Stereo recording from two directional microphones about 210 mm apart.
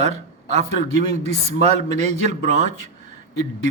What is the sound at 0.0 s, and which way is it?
A man's voice, 35° right (ahead or behind).